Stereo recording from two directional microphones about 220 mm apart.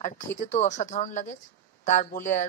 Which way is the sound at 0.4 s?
30° left (ahead or behind).